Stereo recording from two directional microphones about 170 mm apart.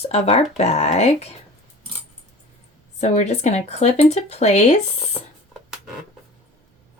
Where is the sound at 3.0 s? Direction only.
40° left (ahead or behind).